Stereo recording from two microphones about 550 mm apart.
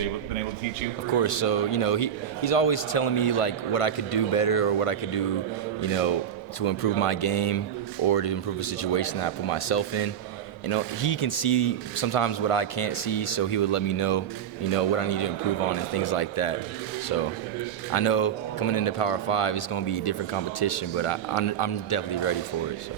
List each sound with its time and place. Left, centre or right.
1.0 s a man's voice: left
17.9 s a man's voice: left